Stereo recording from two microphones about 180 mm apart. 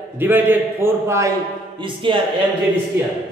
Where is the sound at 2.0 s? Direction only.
30° right (ahead or behind).